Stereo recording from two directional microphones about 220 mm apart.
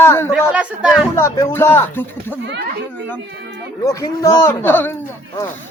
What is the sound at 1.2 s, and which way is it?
Speech, 10° left (ahead or behind).